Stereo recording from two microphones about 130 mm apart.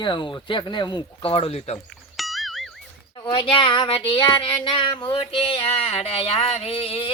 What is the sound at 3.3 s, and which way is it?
Speech, 40° left (ahead or behind).